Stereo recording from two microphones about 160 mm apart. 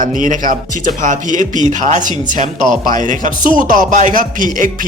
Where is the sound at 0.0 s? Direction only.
55° right (ahead or behind).